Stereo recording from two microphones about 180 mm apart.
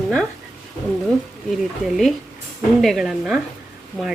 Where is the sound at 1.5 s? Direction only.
Centre (ahead or behind).